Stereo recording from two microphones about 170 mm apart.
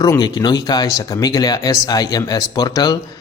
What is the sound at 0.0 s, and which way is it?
A man's voice, 20° left (ahead or behind).